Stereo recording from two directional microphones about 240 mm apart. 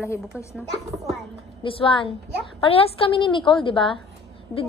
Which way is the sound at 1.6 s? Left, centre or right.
Left.